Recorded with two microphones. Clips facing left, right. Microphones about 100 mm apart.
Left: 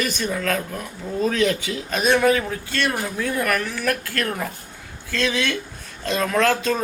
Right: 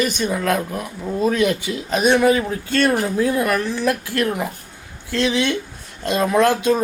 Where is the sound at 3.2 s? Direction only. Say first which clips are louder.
Right 1 dB; 20° right (ahead or behind).